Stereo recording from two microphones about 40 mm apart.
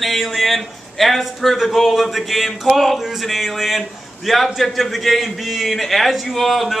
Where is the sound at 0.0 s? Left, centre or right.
Centre.